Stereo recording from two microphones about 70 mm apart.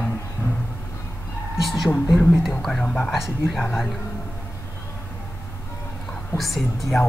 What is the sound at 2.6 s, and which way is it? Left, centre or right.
Speech, centre.